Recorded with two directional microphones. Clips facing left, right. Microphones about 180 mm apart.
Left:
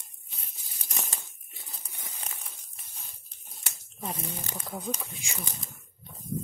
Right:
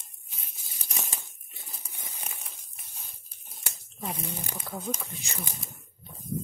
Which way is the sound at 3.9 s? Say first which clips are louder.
Right 1 dB; centre (ahead or behind).